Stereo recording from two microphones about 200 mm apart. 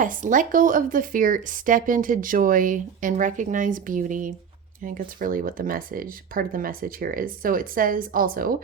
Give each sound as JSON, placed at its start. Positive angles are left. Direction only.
{"t": 0.0, "sound": "speech", "side_deg": -40}